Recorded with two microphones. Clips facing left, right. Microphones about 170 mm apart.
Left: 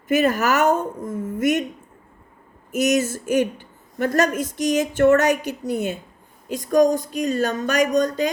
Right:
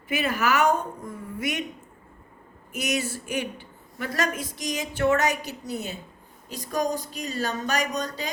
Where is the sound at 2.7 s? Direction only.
45° left (ahead or behind).